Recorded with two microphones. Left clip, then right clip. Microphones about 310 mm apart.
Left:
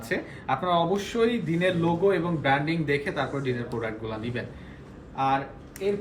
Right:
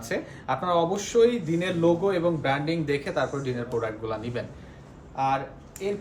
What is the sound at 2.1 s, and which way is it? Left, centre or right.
Speech, centre.